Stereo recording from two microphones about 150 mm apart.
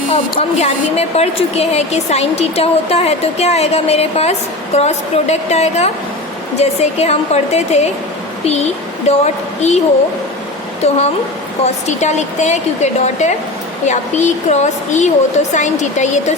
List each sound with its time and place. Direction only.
0.1 s a woman's voice: 45° left (ahead or behind)
9.0 s a woman's voice: 50° left (ahead or behind)
10.8 s a woman's voice: 45° left (ahead or behind)